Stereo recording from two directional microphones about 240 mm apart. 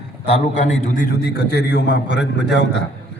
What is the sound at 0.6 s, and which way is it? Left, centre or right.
A man's voice, left.